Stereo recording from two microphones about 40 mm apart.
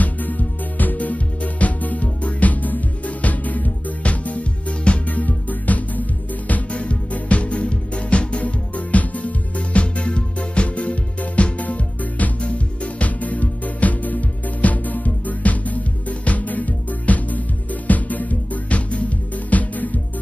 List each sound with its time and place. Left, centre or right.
0.0 s music: left
12.4 s music: left